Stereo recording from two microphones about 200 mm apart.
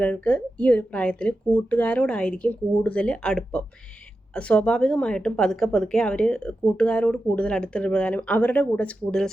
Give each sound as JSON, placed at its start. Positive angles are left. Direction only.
{"t": 0.0, "sound": "speech", "side_deg": 5}